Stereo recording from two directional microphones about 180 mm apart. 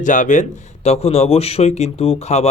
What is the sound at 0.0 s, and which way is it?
Speech, 45° left (ahead or behind).